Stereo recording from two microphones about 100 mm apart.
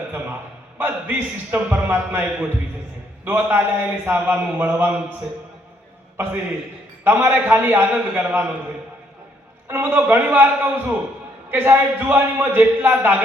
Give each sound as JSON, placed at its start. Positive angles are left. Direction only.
{"t": 0.8, "sound": "a man's voice", "side_deg": -20}
{"t": 7.0, "sound": "a man's voice", "side_deg": -20}
{"t": 9.6, "sound": "a man's voice", "side_deg": -25}